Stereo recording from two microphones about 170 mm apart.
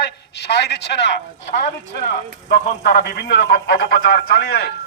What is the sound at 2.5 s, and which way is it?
A man's voice, 65° left (ahead or behind).